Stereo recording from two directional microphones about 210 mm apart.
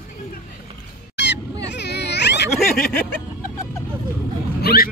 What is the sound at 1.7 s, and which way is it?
Baby cry, 55° left (ahead or behind).